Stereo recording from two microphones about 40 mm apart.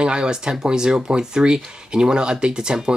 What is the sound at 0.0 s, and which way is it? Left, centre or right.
Speech, right.